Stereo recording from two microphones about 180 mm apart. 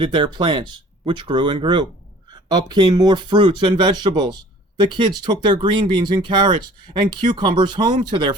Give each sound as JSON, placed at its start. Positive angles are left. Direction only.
{"t": 0.0, "sound": "speech", "side_deg": -25}